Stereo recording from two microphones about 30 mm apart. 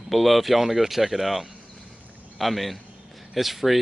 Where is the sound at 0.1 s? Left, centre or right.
Centre.